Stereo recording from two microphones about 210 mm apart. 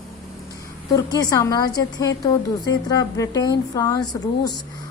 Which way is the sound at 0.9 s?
15° left (ahead or behind).